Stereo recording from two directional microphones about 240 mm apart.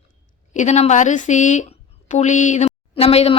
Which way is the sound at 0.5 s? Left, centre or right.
Left.